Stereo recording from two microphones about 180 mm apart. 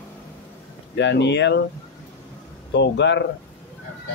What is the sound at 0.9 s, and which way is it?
Speech, 75° left (ahead or behind).